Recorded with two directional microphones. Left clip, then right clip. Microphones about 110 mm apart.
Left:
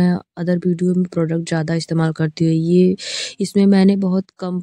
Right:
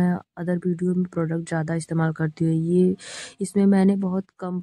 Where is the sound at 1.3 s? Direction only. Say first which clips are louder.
Left 6 dB; 25° left (ahead or behind).